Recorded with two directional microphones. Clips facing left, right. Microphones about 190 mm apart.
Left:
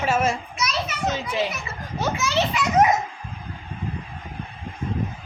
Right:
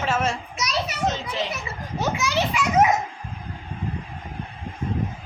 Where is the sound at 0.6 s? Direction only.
35° right (ahead or behind).